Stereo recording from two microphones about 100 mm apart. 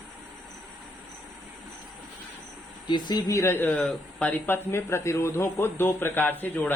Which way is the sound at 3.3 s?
25° left (ahead or behind).